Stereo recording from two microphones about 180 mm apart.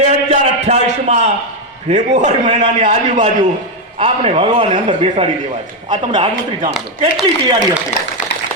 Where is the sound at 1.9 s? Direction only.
40° right (ahead or behind); by 6.3 s 25° right (ahead or behind).